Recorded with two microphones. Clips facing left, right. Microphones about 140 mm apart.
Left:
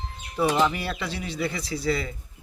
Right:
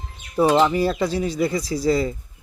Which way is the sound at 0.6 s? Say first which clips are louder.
Right 7 dB; 35° right (ahead or behind).